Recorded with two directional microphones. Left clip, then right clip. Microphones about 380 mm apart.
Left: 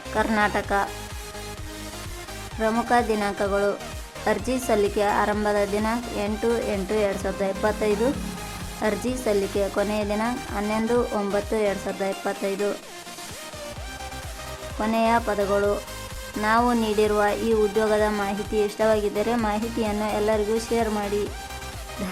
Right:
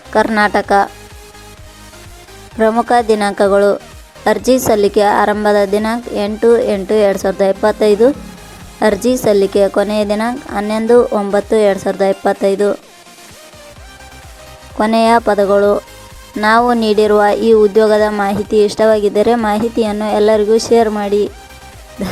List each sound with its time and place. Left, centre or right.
0.1 s speech: centre
2.6 s speech: centre
14.8 s speech: centre